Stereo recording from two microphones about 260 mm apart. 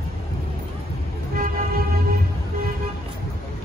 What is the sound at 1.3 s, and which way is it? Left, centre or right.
Vehicle, right.